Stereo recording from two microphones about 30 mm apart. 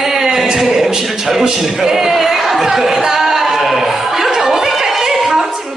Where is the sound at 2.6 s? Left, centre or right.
Centre.